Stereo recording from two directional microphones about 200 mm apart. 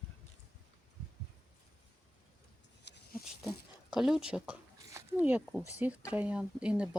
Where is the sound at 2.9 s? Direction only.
55° left (ahead or behind).